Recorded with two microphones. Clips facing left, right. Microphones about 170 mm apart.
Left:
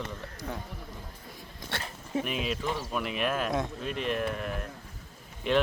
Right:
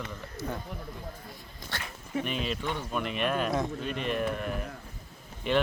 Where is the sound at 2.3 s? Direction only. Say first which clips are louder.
Left 1 dB; 5° left (ahead or behind).